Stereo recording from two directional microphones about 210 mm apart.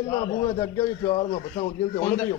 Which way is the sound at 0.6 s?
25° left (ahead or behind).